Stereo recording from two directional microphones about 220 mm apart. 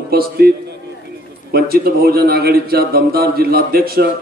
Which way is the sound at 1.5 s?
45° right (ahead or behind).